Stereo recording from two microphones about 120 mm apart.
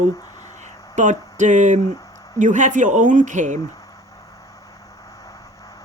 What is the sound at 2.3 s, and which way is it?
Speech, 90° right.